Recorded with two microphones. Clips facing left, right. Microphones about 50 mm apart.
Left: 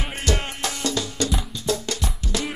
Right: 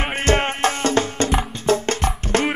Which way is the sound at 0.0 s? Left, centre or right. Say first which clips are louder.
Right 7 dB; right.